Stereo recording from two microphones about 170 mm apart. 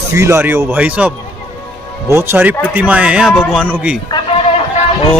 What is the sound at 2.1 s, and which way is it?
A man's voice, 10° right (ahead or behind).